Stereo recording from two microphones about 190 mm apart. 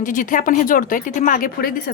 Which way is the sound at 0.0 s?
45° left (ahead or behind).